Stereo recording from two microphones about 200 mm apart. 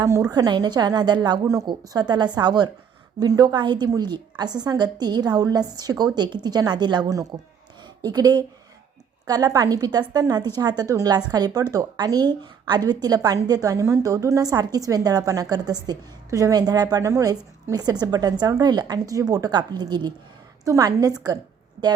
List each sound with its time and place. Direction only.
0.0 s a woman's voice: 15° right (ahead or behind)